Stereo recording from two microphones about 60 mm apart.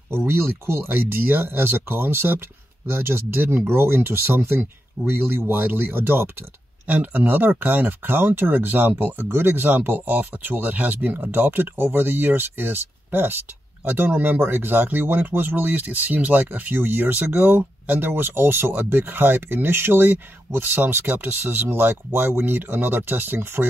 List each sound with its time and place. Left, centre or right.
0.1 s speech: right